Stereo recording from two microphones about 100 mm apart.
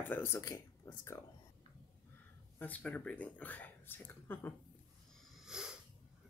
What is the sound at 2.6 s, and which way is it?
Speech, 15° left (ahead or behind).